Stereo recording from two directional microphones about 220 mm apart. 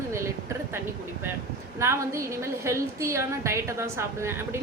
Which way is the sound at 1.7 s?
10° right (ahead or behind).